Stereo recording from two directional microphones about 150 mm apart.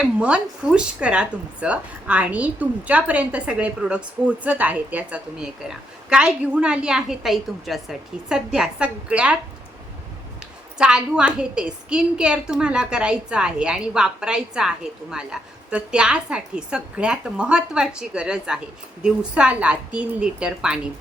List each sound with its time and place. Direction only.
0.2 s a woman's voice: 5° right (ahead or behind)
10.8 s a woman's voice: 5° right (ahead or behind)